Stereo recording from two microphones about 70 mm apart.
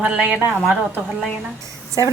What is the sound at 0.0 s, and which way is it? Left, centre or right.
Speech, centre.